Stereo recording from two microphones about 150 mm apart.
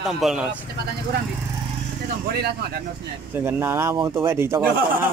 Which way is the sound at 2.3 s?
90° right.